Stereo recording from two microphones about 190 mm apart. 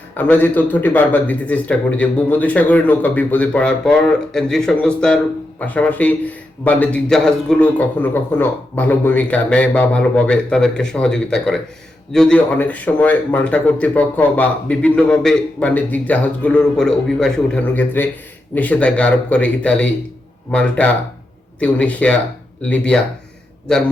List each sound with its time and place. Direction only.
0.1 s a man's voice: 10° left (ahead or behind)